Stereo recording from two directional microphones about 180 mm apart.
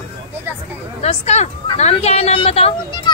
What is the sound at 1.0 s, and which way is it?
A child's voice, 35° left (ahead or behind).